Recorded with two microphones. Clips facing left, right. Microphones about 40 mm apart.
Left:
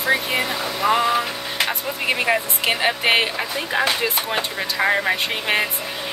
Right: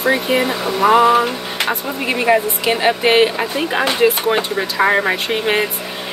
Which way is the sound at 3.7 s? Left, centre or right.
Right.